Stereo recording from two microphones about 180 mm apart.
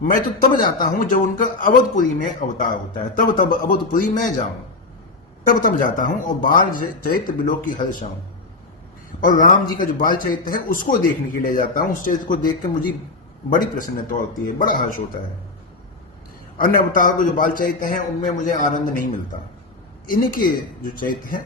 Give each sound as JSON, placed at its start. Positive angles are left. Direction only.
{"t": 0.1, "sound": "a man's voice", "side_deg": 50}
{"t": 5.5, "sound": "a man's voice", "side_deg": 50}
{"t": 9.2, "sound": "a man's voice", "side_deg": 45}
{"t": 13.5, "sound": "a man's voice", "side_deg": 50}
{"t": 16.6, "sound": "a man's voice", "side_deg": 50}
{"t": 20.1, "sound": "a man's voice", "side_deg": 50}